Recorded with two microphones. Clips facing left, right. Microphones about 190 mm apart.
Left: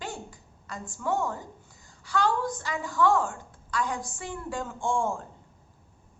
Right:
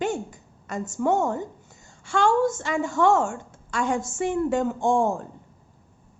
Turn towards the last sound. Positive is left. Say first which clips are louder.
# right 6 dB
turn(degrees=-20)  # may be behind; listen again after turning